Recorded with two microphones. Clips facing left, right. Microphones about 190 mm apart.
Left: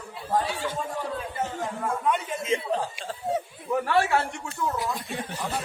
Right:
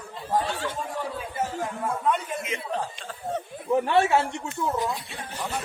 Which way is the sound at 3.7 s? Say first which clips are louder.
Right 3 dB; 20° right (ahead or behind).